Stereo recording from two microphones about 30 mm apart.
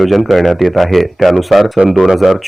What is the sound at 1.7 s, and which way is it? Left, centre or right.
Speech, right.